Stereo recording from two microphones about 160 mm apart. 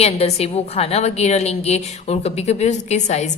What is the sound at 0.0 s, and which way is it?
A woman's voice, 40° left (ahead or behind).